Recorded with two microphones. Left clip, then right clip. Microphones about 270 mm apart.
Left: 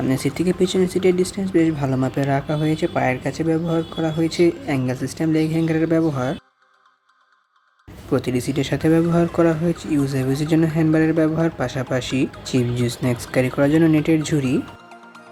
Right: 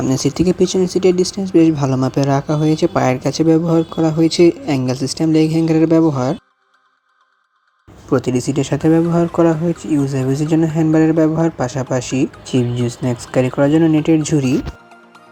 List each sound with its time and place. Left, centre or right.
0.0 s speech: centre
8.1 s speech: centre